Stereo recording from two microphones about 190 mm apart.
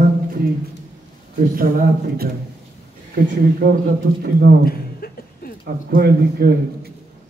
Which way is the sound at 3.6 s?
60° right (ahead or behind).